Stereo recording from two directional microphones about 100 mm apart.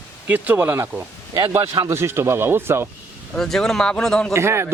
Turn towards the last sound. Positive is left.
turn(degrees=-25)  # may be behind; listen again after turning